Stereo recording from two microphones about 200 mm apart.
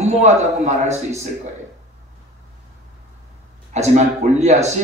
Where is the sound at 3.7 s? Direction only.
35° right (ahead or behind).